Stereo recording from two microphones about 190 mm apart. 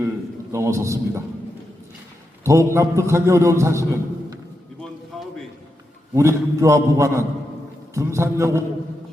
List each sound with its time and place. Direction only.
0.5 s a man's voice: 15° right (ahead or behind)
2.4 s a man's voice: 15° right (ahead or behind)
5.1 s a sound: centre (ahead or behind)
6.1 s a man's voice: 15° right (ahead or behind)